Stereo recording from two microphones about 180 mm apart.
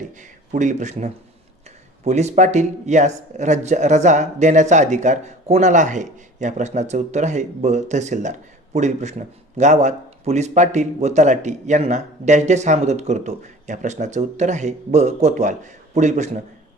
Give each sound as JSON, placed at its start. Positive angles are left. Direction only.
{"t": 0.1, "sound": "speech", "side_deg": -45}